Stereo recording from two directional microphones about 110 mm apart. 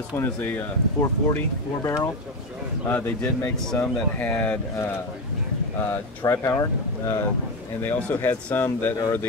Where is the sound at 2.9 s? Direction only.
15° left (ahead or behind).